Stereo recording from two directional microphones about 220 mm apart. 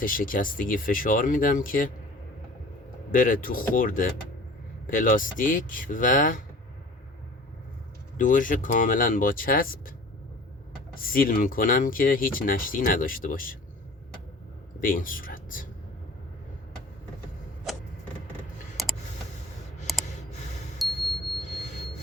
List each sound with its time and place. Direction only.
0.0 s speech: 40° left (ahead or behind)
3.1 s speech: 40° left (ahead or behind)
8.2 s speech: 35° left (ahead or behind)
11.0 s speech: 40° left (ahead or behind)
14.8 s speech: 40° left (ahead or behind)
18.8 s a sound: centre (ahead or behind)